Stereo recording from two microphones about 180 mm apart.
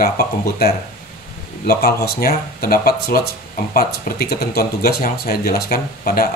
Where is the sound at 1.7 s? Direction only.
60° left (ahead or behind).